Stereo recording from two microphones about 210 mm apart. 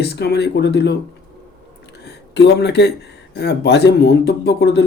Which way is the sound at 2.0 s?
55° left (ahead or behind).